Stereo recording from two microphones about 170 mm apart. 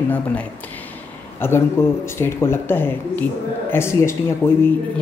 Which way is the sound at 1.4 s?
15° left (ahead or behind).